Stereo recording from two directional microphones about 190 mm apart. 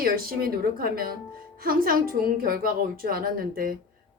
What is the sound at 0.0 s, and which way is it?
A woman's voice, 50° right (ahead or behind).